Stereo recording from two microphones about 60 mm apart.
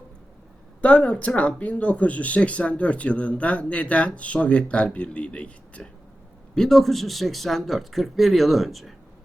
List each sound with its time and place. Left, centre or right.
0.8 s speech: left
6.5 s speech: centre